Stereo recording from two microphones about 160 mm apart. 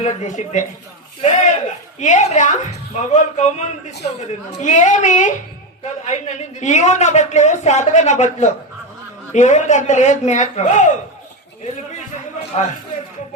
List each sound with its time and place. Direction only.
0.0 s a woman's voice: 45° left (ahead or behind)